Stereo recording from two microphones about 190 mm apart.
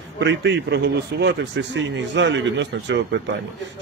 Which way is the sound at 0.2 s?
65° right (ahead or behind).